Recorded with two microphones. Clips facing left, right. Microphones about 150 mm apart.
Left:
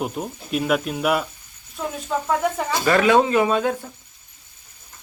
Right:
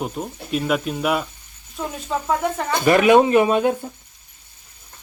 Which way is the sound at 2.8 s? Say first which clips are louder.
Right 3 dB; 20° right (ahead or behind).